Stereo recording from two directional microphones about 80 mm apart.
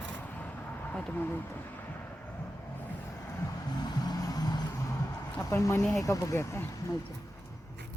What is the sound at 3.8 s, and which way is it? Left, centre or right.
Vehicle, left.